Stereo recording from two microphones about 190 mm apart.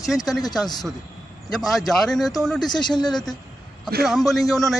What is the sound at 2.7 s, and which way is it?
Speech, 25° left (ahead or behind).